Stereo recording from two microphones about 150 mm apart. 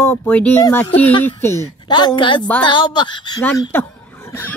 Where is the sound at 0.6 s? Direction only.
25° left (ahead or behind).